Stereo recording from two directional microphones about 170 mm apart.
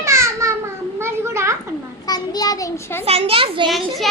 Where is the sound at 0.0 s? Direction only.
15° right (ahead or behind).